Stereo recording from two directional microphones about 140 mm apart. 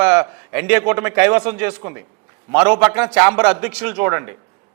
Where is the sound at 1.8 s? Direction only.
20° right (ahead or behind).